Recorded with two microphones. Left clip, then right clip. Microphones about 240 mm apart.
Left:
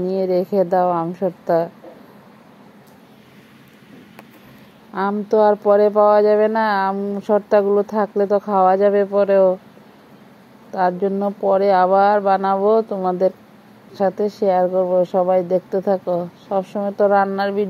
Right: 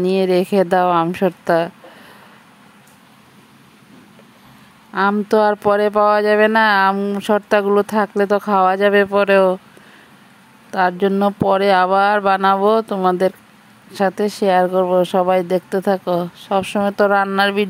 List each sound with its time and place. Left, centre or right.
0.0 s speech: right
4.9 s speech: right
10.7 s speech: right